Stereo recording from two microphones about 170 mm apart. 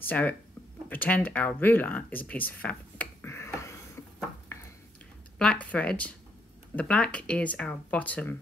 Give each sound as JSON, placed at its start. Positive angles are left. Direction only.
{"t": 0.0, "sound": "speech", "side_deg": 10}
{"t": 4.5, "sound": "a sound", "side_deg": 15}
{"t": 5.4, "sound": "speech", "side_deg": 5}